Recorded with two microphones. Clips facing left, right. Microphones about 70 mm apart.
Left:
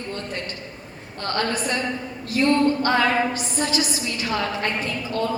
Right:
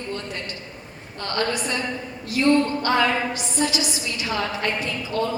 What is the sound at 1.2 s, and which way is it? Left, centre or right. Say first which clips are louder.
Speech: left 1 dB; left.